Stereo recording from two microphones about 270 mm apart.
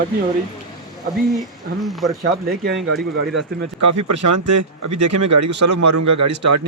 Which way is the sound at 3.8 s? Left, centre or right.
Right.